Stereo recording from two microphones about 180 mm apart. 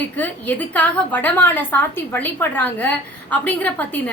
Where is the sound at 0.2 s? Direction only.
10° left (ahead or behind).